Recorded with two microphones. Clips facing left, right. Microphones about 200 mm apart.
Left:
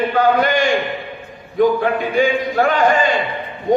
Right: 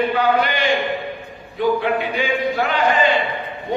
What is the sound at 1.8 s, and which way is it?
Speech, 45° left (ahead or behind).